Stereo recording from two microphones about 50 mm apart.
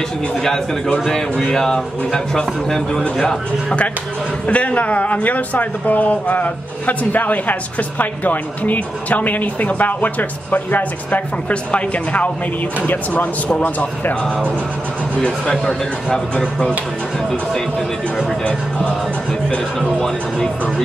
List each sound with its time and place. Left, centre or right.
0.4 s speech: centre
4.5 s speech: left
15.2 s speech: centre
20.0 s speech: centre